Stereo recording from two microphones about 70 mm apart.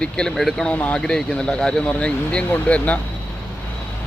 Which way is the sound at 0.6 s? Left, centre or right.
Left.